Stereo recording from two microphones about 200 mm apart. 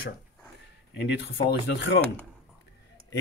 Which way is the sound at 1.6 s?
55° left (ahead or behind).